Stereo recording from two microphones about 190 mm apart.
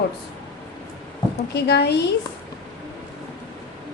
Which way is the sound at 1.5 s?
60° left (ahead or behind).